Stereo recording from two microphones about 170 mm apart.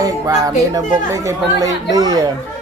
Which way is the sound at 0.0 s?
20° right (ahead or behind).